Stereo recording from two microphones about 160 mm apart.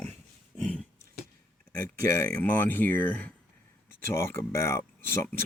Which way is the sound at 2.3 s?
10° left (ahead or behind).